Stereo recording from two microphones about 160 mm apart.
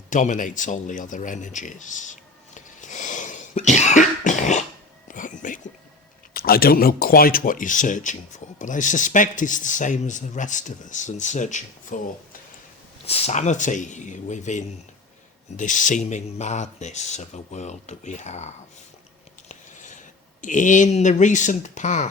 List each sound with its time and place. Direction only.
0.1 s speech: 55° left (ahead or behind)
2.6 s cough: 50° left (ahead or behind)
5.0 s a sound: 55° left (ahead or behind)
6.3 s speech: 70° left (ahead or behind); by 11.9 s 50° left (ahead or behind)
13.1 s speech: 40° left (ahead or behind)
20.4 s speech: 50° left (ahead or behind)